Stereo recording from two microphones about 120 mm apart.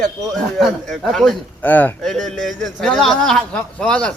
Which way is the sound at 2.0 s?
5° left (ahead or behind).